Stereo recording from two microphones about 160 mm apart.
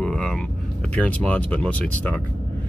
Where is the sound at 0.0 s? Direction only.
5° left (ahead or behind).